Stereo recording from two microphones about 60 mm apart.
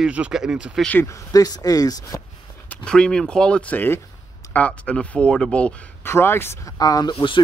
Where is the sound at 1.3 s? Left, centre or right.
Left.